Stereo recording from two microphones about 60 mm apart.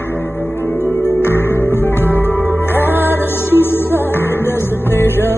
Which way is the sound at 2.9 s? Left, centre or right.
Right.